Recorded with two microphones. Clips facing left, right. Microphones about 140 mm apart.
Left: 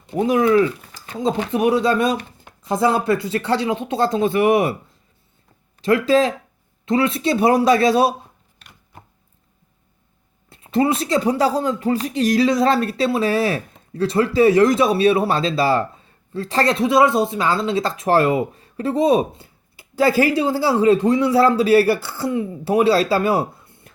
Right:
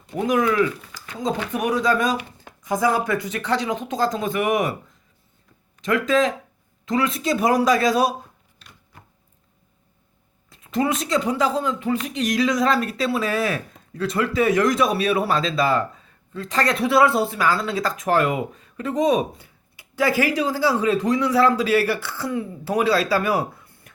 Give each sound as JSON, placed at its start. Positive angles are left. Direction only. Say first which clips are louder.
{"t": 0.2, "sound": "speech", "louder": "left 4 dB", "side_deg": 30}
{"t": 5.8, "sound": "speech", "louder": "left 4 dB", "side_deg": 30}
{"t": 10.5, "sound": "speech", "louder": "left 4 dB", "side_deg": 30}